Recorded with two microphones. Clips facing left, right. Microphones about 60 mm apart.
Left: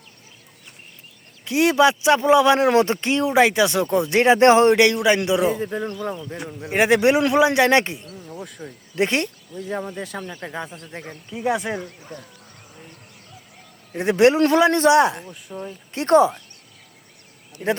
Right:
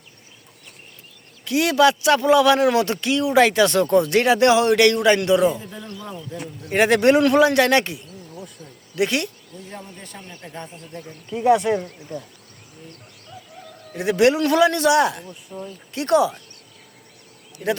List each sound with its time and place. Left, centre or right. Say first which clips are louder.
1.5 s speech: even; left
3.3 s speech: right 2 dB; centre; by 4.8 s left
4.8 s a man's voice: right 1 dB; centre
5.5 s speech: left 8 dB; left
6.7 s a man's voice: right 1 dB; centre
8.0 s speech: left 3 dB; left
9.0 s speech: left 1 dB; left
11.3 s a man's voice: right 6 dB; centre
13.9 s speech: left 1 dB; left
15.3 s speech: left 1 dB; left
16.0 s speech: left 3 dB; left
17.6 s speech: left 1 dB; left